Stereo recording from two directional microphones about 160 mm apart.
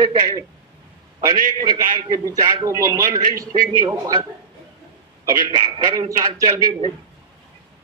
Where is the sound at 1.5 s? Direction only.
30° right (ahead or behind).